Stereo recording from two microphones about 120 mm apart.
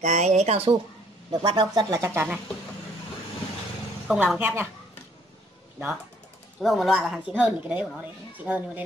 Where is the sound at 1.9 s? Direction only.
20° right (ahead or behind).